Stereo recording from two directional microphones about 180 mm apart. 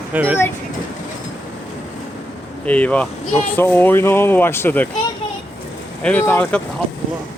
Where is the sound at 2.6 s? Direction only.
5° left (ahead or behind).